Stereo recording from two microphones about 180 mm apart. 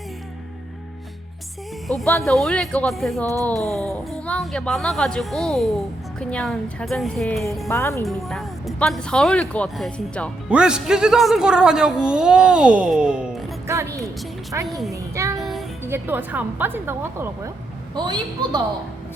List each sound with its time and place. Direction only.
1.9 s speech: centre (ahead or behind)
7.7 s speech: 15° left (ahead or behind)
8.0 s speech: centre (ahead or behind)
13.7 s speech: 15° right (ahead or behind)
14.9 s child singing: 15° right (ahead or behind)
15.4 s music: centre (ahead or behind)
15.8 s speech: 10° right (ahead or behind)
17.9 s a woman's voice: 25° right (ahead or behind)